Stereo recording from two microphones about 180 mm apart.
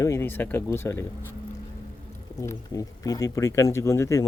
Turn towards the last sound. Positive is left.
turn(degrees=15)  # may be behind; listen again after turning